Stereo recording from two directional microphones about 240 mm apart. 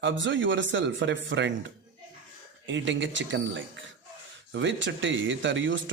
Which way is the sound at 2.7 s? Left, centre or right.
Right.